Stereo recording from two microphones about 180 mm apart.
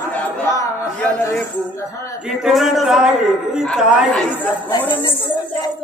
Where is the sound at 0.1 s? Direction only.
20° left (ahead or behind).